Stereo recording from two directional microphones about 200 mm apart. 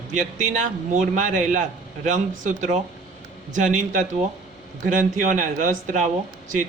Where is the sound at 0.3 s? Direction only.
40° right (ahead or behind).